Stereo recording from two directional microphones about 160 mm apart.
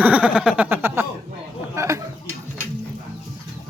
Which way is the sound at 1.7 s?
20° right (ahead or behind).